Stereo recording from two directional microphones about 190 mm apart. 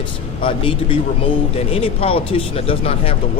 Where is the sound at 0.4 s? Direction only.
25° left (ahead or behind).